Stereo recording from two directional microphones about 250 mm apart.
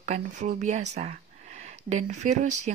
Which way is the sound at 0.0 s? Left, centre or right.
Right.